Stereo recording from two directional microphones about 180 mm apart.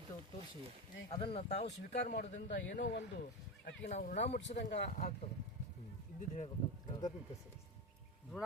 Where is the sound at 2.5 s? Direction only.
80° left.